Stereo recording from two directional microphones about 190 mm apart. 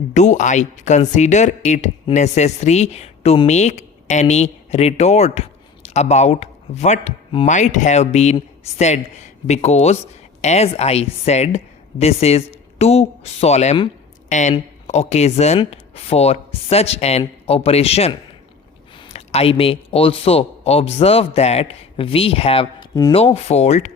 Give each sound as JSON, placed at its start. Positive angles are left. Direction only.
{"t": 0.1, "sound": "speech", "side_deg": 40}